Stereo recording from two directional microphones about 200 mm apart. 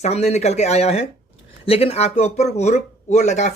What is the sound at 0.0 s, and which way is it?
Speech, 35° left (ahead or behind).